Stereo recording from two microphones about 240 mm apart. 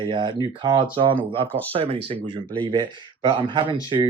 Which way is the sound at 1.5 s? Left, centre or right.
Centre.